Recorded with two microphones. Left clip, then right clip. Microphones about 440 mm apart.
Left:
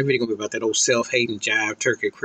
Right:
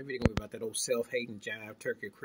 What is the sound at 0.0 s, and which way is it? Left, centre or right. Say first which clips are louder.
Speech: left 13 dB; right.